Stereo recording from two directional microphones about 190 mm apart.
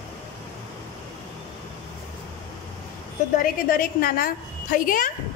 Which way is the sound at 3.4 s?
50° left (ahead or behind).